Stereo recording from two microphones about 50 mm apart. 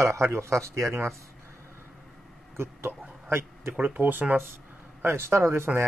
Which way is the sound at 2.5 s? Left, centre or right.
Right.